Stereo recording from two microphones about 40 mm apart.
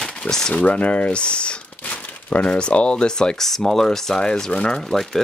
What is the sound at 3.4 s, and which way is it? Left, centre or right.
Speech, centre.